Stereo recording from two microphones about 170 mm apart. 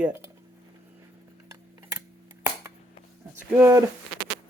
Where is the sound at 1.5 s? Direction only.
15° right (ahead or behind).